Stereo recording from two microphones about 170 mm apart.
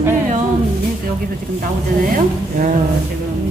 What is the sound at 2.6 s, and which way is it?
Speech, 50° right (ahead or behind).